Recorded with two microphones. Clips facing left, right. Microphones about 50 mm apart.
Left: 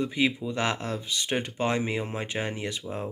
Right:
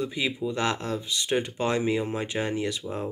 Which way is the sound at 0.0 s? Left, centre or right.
Left.